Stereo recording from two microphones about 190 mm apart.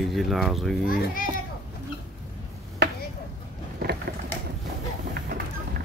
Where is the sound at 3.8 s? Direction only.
55° right (ahead or behind).